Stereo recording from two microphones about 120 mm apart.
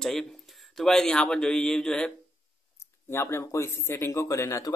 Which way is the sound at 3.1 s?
20° left (ahead or behind).